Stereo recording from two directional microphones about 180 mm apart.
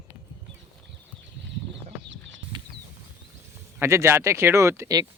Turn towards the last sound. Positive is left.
turn(degrees=-20)  # may be behind; listen again after turning